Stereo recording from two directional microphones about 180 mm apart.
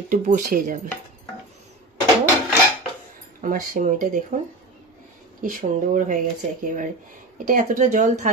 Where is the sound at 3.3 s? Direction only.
45° right (ahead or behind).